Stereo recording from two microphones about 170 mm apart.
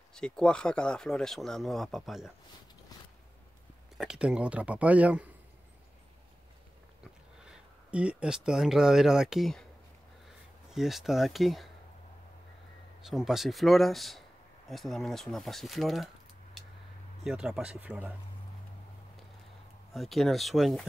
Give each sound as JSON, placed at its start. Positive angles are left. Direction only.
{"t": 0.1, "sound": "speech", "side_deg": 5}
{"t": 2.9, "sound": "a sound", "side_deg": 20}
{"t": 4.0, "sound": "speech", "side_deg": -5}
{"t": 7.4, "sound": "speech", "side_deg": -5}
{"t": 10.7, "sound": "speech", "side_deg": 0}
{"t": 13.0, "sound": "speech", "side_deg": 0}
{"t": 17.2, "sound": "speech", "side_deg": 0}
{"t": 19.9, "sound": "speech", "side_deg": 0}